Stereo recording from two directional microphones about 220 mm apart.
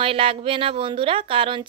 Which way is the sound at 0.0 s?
25° right (ahead or behind).